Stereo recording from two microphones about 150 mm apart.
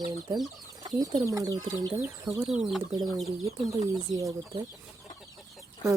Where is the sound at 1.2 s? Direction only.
25° right (ahead or behind).